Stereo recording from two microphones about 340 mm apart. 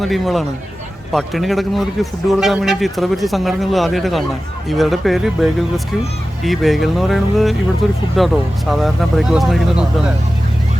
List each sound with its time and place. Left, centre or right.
0.0 s a man's voice: centre